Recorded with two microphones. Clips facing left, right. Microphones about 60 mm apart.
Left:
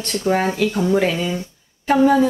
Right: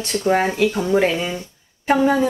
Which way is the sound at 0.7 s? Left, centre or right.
Centre.